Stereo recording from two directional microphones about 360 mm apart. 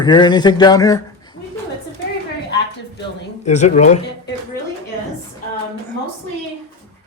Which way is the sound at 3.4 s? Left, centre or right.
Centre.